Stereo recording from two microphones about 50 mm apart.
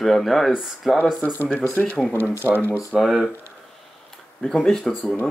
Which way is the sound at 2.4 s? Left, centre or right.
Left.